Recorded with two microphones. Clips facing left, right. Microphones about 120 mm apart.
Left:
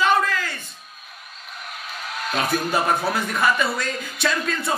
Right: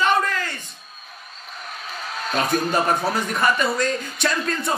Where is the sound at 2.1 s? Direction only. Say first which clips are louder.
Right 1 dB; 30° right (ahead or behind).